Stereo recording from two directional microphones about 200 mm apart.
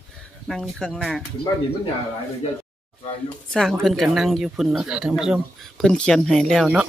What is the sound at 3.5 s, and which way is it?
Speech, centre (ahead or behind).